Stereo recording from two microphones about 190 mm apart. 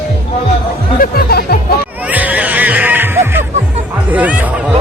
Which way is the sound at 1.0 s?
55° left (ahead or behind).